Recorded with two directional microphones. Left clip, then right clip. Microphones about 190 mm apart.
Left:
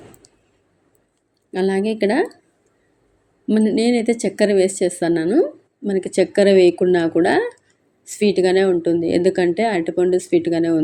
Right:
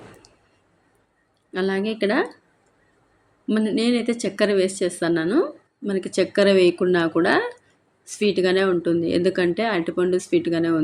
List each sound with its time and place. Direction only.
1.5 s speech: 15° left (ahead or behind)
3.4 s speech: 10° left (ahead or behind)